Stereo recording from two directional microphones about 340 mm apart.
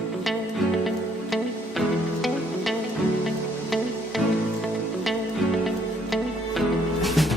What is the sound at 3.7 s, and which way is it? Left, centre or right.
Music, centre.